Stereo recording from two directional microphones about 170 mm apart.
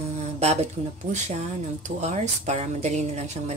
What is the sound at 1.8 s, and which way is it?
Speech, 40° right (ahead or behind).